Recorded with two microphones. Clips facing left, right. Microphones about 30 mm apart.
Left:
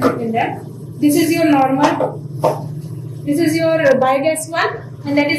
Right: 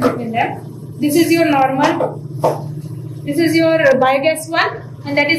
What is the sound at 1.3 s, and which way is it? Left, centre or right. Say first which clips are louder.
A woman's voice: even; centre.